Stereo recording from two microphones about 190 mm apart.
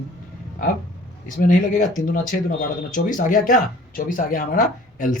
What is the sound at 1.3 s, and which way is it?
Speech, 45° left (ahead or behind).